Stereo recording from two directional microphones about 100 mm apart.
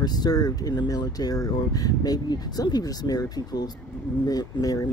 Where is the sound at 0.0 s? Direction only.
45° left (ahead or behind).